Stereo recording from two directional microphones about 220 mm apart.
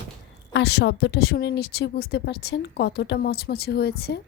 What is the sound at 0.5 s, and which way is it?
A woman's voice, 50° left (ahead or behind).